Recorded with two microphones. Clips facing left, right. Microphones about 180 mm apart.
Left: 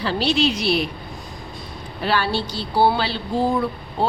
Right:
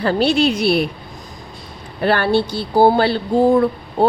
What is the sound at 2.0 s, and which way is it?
A woman's voice, 55° right (ahead or behind).